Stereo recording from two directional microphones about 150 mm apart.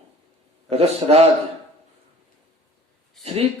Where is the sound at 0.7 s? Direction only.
45° right (ahead or behind).